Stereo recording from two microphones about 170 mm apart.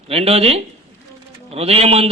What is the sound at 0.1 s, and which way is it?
A man's voice, 35° right (ahead or behind).